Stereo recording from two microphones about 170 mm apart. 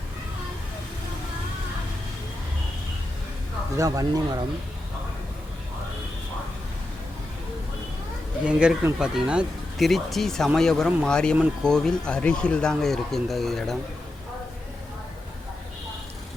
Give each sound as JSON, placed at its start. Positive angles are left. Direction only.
{"t": 3.8, "sound": "speech", "side_deg": -20}
{"t": 8.4, "sound": "speech", "side_deg": -5}